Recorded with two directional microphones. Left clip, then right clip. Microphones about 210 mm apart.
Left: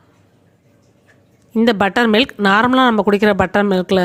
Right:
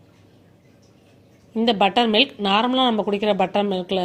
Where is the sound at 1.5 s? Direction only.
50° left (ahead or behind).